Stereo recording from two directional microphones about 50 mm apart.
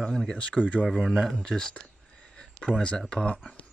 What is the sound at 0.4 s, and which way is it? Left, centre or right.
Speech, left.